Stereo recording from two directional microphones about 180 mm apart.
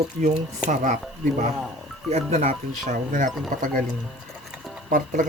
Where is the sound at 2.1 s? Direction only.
35° right (ahead or behind).